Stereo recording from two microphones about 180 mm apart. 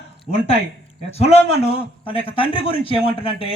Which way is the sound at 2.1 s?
30° left (ahead or behind).